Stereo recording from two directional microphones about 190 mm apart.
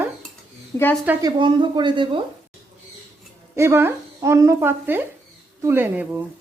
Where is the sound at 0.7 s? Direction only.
20° left (ahead or behind).